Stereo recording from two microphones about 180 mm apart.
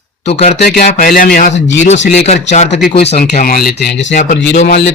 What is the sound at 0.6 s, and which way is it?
Speech, 55° left (ahead or behind).